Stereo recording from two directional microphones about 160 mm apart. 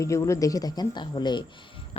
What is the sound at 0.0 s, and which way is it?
A woman's voice, 20° left (ahead or behind).